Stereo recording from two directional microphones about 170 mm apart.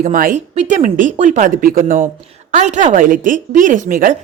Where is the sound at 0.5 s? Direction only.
45° right (ahead or behind).